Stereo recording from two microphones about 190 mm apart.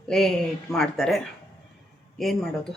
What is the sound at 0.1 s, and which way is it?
Speech, centre (ahead or behind).